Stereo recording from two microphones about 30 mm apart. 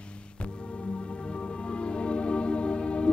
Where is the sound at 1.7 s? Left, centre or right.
Left.